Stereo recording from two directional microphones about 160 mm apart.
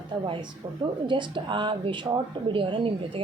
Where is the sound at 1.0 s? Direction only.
30° right (ahead or behind).